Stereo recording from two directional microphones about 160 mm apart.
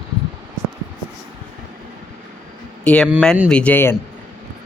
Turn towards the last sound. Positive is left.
turn(degrees=10)  # may be behind; listen again after turning